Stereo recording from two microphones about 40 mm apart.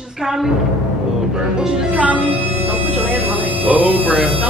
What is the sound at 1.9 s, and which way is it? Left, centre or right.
Speech, right.